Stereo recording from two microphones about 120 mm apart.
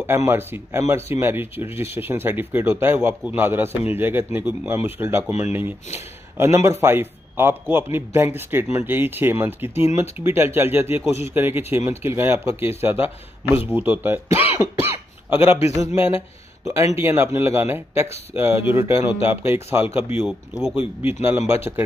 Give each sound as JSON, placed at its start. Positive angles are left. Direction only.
{"t": 0.0, "sound": "a man's voice", "side_deg": -20}
{"t": 20.7, "sound": "speech", "side_deg": 55}
{"t": 21.1, "sound": "a man's voice", "side_deg": -20}